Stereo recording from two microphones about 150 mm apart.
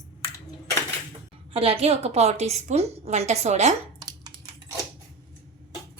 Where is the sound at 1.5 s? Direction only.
40° right (ahead or behind).